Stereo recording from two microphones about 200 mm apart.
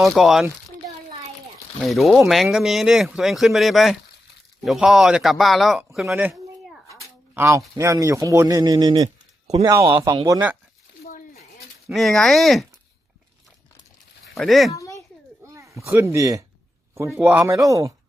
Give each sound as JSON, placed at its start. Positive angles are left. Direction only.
{"t": 0.0, "sound": "speech", "side_deg": 0}
{"t": 1.8, "sound": "a man's voice", "side_deg": 0}
{"t": 11.9, "sound": "speech", "side_deg": 0}
{"t": 14.3, "sound": "speech", "side_deg": 0}
{"t": 14.7, "sound": "a sound", "side_deg": 15}
{"t": 15.5, "sound": "a sound", "side_deg": -15}
{"t": 16.1, "sound": "a man's voice", "side_deg": -15}